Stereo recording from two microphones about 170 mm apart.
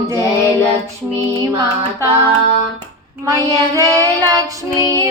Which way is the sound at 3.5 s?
20° right (ahead or behind).